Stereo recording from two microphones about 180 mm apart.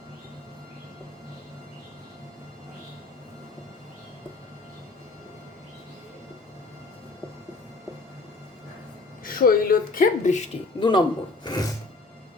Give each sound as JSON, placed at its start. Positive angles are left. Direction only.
{"t": 9.2, "sound": "speech", "side_deg": 55}
{"t": 10.8, "sound": "speech", "side_deg": 25}
{"t": 11.4, "sound": "music", "side_deg": 20}